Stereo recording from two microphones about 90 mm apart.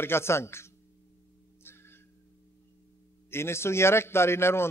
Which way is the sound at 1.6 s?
25° left (ahead or behind).